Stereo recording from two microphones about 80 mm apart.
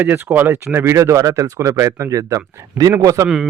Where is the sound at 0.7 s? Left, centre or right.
Right.